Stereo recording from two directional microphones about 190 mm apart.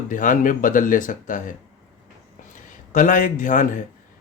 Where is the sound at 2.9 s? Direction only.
45° left (ahead or behind).